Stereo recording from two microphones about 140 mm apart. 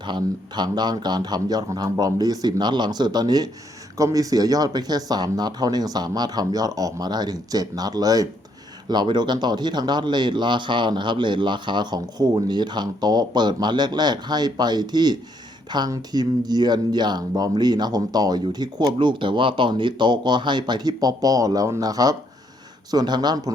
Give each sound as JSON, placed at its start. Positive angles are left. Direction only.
{"t": 0.0, "sound": "speech", "side_deg": -30}